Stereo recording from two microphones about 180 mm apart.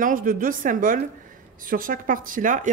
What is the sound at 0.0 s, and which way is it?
Speech, 50° right (ahead or behind).